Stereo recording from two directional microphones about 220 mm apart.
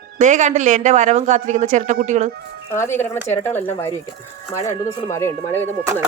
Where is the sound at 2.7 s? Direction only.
10° left (ahead or behind).